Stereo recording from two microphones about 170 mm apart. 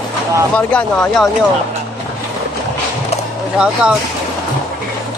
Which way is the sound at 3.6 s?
5° right (ahead or behind).